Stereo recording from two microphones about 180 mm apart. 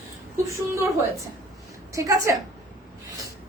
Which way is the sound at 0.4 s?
15° right (ahead or behind).